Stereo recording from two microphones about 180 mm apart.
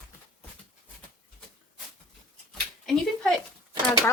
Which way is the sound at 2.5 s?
Centre (ahead or behind).